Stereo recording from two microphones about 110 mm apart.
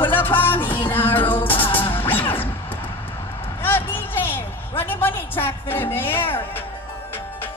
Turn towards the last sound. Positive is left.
turn(degrees=20)  # may be behind; listen again after turning